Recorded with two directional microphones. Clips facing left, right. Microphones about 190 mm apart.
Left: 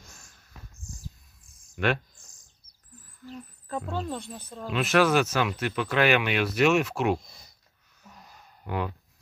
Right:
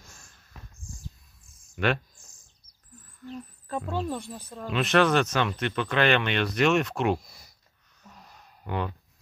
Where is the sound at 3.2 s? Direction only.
Centre (ahead or behind).